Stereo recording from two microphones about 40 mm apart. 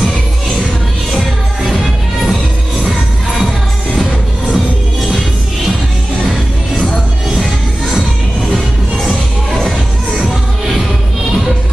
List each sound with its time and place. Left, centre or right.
1.1 s music: centre